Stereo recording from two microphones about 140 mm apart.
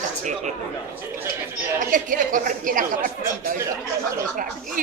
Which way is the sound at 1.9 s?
70° right (ahead or behind).